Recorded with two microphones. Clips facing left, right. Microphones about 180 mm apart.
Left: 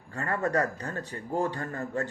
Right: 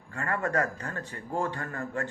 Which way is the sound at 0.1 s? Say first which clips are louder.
Left 2 dB; 35° left (ahead or behind).